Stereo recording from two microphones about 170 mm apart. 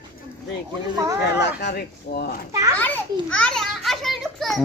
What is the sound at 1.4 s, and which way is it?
Speech, 80° left.